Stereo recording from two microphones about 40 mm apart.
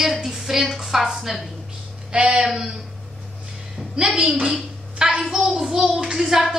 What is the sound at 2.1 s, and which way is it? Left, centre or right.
Speech, right.